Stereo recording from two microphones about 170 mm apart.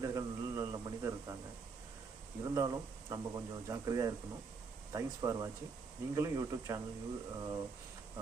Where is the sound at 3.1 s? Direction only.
15° right (ahead or behind).